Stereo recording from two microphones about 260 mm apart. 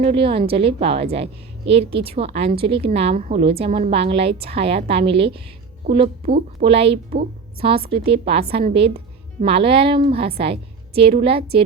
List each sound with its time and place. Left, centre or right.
0.0 s a woman's voice: right
6.9 s speech: right
7.9 s a woman's voice: right